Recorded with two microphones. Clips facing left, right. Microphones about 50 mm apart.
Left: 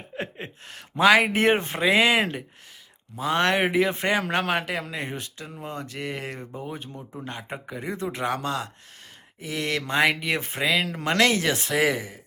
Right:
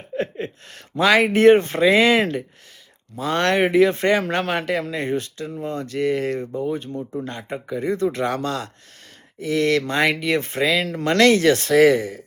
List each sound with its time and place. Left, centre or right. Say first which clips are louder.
0.2 s speech: right 8 dB; left